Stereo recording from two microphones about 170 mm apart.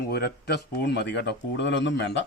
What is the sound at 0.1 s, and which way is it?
Speech, 70° left (ahead or behind).